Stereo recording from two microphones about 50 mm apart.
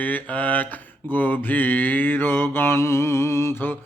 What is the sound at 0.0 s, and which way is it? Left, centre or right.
Mantra, left.